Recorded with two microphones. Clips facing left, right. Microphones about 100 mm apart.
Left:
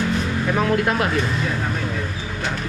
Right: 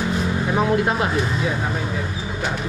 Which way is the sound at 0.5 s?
15° right (ahead or behind).